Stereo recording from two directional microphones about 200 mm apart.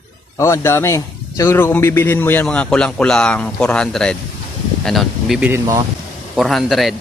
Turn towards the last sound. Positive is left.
turn(degrees=0)  # may be behind; listen again after turning